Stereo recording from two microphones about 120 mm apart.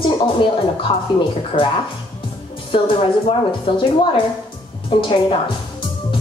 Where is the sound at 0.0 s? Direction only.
45° left (ahead or behind).